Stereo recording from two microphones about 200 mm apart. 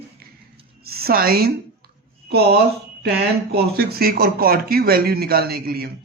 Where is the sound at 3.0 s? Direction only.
55° right (ahead or behind).